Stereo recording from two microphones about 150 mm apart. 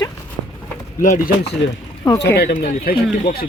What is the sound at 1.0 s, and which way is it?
Speech, 65° left (ahead or behind).